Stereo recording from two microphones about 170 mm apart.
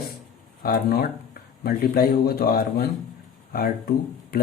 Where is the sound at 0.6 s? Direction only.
65° left (ahead or behind).